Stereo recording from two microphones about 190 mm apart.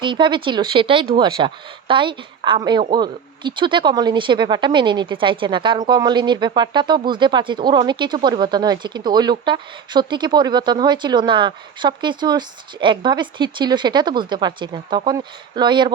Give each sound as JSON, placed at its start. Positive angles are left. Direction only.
{"t": 0.0, "sound": "speech", "side_deg": -25}